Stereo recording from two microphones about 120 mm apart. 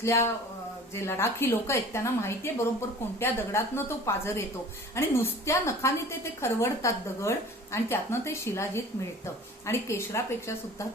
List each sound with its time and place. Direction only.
0.0 s a woman's voice: 25° left (ahead or behind)